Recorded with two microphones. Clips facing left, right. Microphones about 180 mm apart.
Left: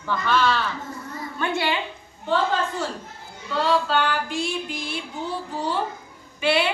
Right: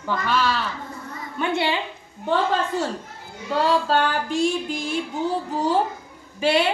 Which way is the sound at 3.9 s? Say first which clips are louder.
Right 2 dB; 40° right (ahead or behind).